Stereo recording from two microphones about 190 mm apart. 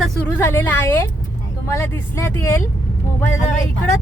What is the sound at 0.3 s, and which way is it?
Speech, 10° left (ahead or behind).